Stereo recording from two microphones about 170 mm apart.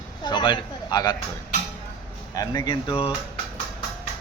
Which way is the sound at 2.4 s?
25° left (ahead or behind).